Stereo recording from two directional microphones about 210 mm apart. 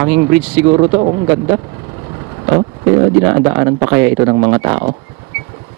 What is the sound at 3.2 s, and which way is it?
Speech, 20° right (ahead or behind).